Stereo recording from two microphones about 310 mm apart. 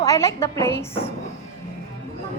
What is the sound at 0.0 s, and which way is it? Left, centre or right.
Speech, centre.